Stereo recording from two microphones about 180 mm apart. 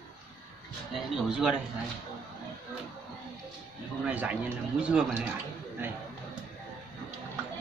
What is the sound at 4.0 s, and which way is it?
Speech, 10° right (ahead or behind).